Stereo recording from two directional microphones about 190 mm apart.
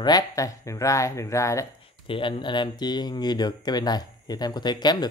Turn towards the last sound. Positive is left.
turn(degrees=20)  # may be behind; listen again after turning